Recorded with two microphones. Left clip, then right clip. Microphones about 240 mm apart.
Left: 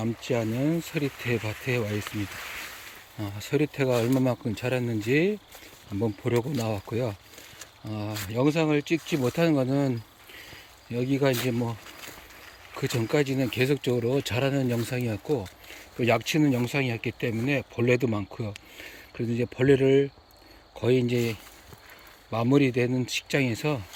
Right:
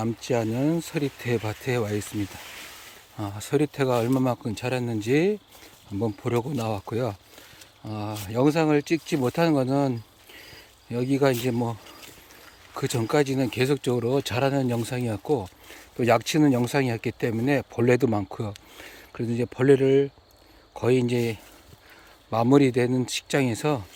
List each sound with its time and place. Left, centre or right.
0.0 s speech: centre
3.2 s speech: centre
12.7 s speech: centre